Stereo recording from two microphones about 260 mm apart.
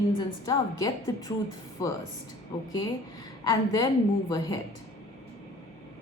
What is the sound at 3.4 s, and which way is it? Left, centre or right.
Speech, centre.